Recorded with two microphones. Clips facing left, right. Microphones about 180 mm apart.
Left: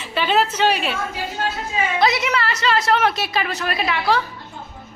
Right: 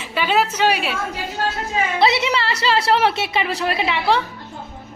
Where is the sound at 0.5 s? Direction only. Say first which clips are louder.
Even; 10° right (ahead or behind).